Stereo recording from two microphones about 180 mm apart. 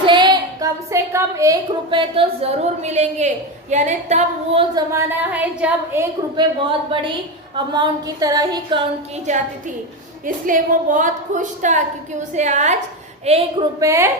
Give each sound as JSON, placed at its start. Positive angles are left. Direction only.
{"t": 0.0, "sound": "a woman's voice", "side_deg": -25}
{"t": 4.7, "sound": "a woman's voice", "side_deg": -15}
{"t": 6.3, "sound": "a sound", "side_deg": -25}
{"t": 9.3, "sound": "a woman's voice", "side_deg": -40}
{"t": 13.7, "sound": "a woman's voice", "side_deg": -15}